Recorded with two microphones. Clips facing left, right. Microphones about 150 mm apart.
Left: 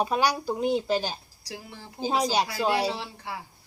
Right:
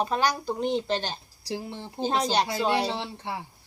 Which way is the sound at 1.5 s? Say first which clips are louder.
Right 7 dB; 25° right (ahead or behind).